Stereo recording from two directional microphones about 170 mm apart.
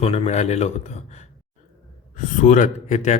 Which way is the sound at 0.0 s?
40° left (ahead or behind).